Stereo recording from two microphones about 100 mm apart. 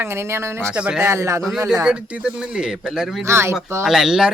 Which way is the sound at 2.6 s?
5° right (ahead or behind).